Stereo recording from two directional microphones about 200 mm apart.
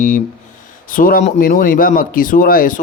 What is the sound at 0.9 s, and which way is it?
A man's voice, 45° left (ahead or behind).